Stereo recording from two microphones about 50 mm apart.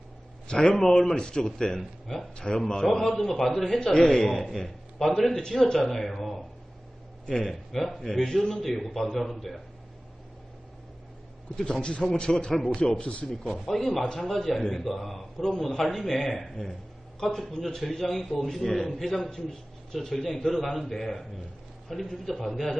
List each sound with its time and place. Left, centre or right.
0.4 s a man's voice: centre
3.8 s a man's voice: centre
11.5 s a man's voice: centre
13.7 s a man's voice: centre